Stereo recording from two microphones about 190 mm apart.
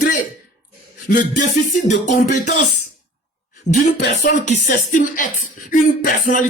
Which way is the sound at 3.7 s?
65° left (ahead or behind).